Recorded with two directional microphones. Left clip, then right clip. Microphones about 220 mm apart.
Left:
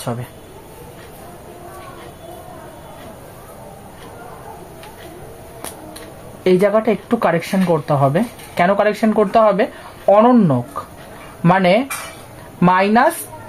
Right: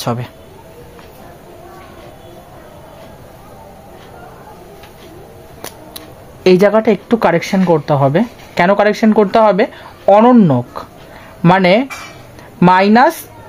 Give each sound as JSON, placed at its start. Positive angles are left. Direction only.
{"t": 0.0, "sound": "speech", "side_deg": -50}
{"t": 5.9, "sound": "speech", "side_deg": -50}